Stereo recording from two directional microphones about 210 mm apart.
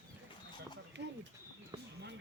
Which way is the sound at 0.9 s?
55° right (ahead or behind).